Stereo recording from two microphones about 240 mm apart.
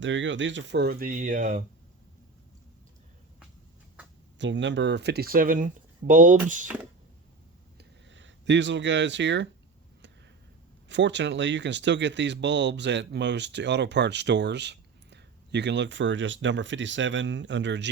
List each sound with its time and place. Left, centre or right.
0.0 s speech: right
4.4 s speech: right
7.8 s a sound: right
10.8 s speech: right